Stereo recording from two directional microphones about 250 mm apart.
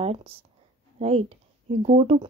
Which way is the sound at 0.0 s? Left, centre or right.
Right.